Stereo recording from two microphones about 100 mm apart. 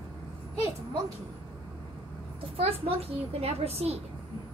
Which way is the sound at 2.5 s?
70° right (ahead or behind).